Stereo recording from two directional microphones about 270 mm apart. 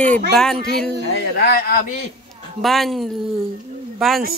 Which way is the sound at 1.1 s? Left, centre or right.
Left.